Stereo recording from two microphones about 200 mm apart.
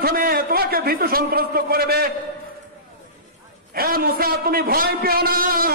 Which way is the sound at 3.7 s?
50° right (ahead or behind).